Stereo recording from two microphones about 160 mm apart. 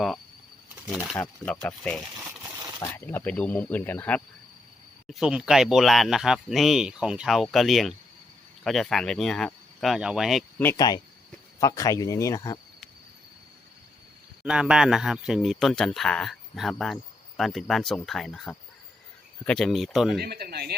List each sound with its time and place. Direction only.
1.1 s speech: 5° left (ahead or behind)
2.4 s a sound: 15° right (ahead or behind)
2.9 s speech: 15° left (ahead or behind)
5.0 s speech: 5° right (ahead or behind)
10.8 s speech: 25° left (ahead or behind)
14.4 s speech: 5° right (ahead or behind)
20.1 s speech: 80° right